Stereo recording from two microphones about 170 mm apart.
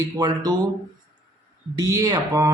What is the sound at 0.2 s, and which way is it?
Speech, 25° right (ahead or behind).